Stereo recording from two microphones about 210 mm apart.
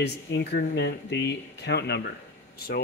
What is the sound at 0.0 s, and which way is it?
Speech, 55° left (ahead or behind).